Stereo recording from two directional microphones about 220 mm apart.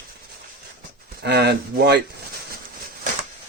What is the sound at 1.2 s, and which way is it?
Speech, 50° right (ahead or behind).